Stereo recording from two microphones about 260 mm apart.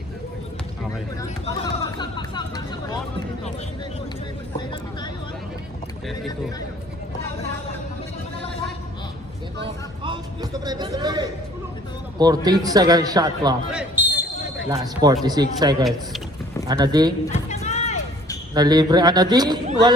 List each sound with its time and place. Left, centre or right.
1.2 s hubbub: centre
10.0 s a man's voice: centre
13.7 s basketball bounce: centre
15.2 s a man's voice: centre
15.8 s speech: centre
16.6 s a man's voice: centre
17.2 s music: left
18.5 s a man's voice: centre